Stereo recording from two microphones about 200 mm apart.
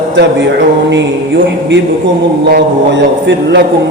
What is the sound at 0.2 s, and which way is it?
Speech, 55° right (ahead or behind).